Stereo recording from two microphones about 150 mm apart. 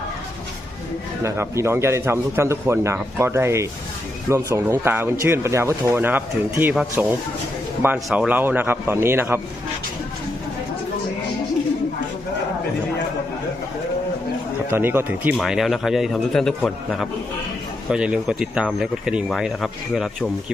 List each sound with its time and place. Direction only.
1.2 s a man's voice: 20° right (ahead or behind)
7.9 s speech: centre (ahead or behind)
8.3 s a man's voice: 15° right (ahead or behind)
14.7 s a man's voice: 15° right (ahead or behind)
15.4 s speech: centre (ahead or behind)